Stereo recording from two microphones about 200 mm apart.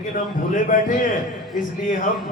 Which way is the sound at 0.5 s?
40° left (ahead or behind).